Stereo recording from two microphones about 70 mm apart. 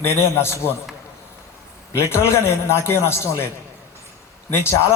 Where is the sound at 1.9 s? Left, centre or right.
Left.